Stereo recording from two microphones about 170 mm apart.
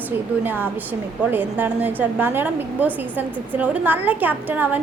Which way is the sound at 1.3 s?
10° right (ahead or behind).